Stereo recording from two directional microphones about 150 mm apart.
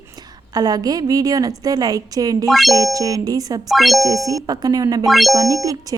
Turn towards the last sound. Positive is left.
turn(degrees=-25)  # may be behind; listen again after turning